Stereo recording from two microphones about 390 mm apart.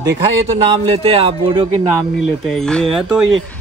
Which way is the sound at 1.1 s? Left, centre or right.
Centre.